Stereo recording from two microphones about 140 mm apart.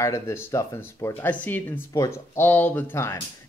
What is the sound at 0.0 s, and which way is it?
Speech, 20° left (ahead or behind).